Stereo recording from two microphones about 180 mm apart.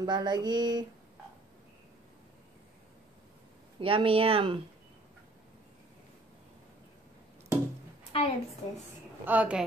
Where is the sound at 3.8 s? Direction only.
30° right (ahead or behind).